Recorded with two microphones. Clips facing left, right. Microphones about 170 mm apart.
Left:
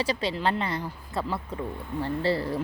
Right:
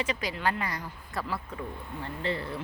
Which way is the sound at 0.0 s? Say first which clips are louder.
Left 4 dB; 30° left (ahead or behind).